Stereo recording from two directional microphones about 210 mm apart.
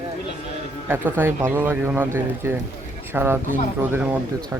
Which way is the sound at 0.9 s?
10° right (ahead or behind).